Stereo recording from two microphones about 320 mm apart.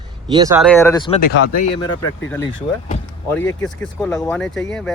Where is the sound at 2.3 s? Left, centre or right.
Centre.